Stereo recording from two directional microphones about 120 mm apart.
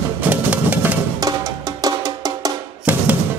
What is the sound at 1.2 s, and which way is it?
Music, 30° right (ahead or behind).